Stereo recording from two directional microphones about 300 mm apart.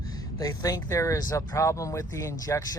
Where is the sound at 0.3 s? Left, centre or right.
Centre.